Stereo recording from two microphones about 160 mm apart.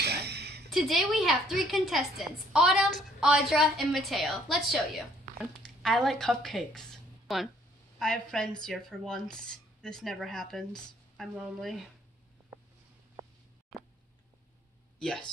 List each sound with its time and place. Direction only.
0.0 s a sound: 90° right
0.7 s a woman's voice: centre (ahead or behind)
15.0 s speech: 5° left (ahead or behind)